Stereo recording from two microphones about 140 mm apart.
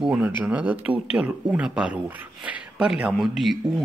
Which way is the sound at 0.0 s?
10° right (ahead or behind).